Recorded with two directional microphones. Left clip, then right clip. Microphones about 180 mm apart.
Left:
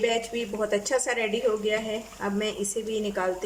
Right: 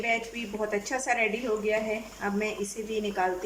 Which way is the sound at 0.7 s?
30° left (ahead or behind).